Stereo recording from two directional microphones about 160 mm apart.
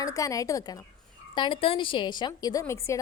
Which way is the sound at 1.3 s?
30° left (ahead or behind).